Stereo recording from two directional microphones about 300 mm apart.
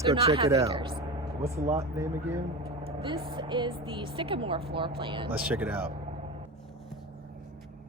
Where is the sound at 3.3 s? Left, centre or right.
Centre.